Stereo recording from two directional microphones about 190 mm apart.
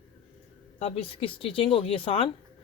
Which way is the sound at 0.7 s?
30° left (ahead or behind).